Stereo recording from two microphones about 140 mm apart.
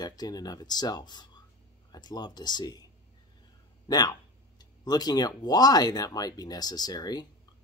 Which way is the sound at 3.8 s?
30° left (ahead or behind).